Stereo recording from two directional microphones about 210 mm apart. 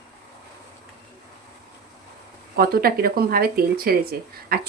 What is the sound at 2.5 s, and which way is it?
Speech, 45° right (ahead or behind).